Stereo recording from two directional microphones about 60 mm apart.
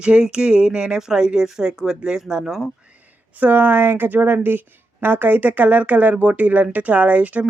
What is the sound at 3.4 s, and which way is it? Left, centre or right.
Speech, right.